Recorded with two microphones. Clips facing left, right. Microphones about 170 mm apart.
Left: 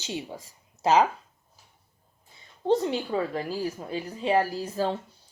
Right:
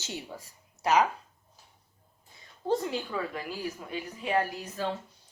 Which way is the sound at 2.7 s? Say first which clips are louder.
Left 5 dB; 25° left (ahead or behind).